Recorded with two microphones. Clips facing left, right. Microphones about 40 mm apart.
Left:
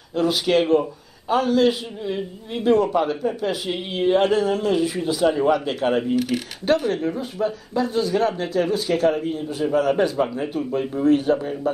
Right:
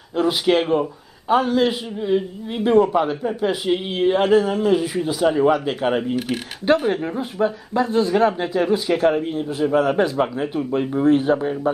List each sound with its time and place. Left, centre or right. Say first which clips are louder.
0.1 s a man's voice: right 1 dB; centre
6.1 s a man's voice: left 2 dB; right
10.8 s speech: right 2 dB; right